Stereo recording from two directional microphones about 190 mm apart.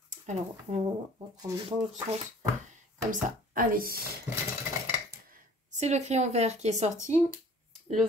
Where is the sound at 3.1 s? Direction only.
45° right (ahead or behind).